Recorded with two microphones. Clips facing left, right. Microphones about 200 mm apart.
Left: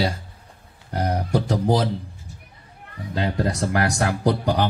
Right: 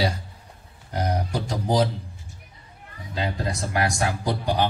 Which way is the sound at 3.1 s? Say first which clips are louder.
Left 4 dB; 65° left (ahead or behind).